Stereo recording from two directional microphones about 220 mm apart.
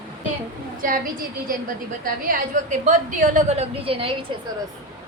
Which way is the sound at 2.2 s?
40° right (ahead or behind).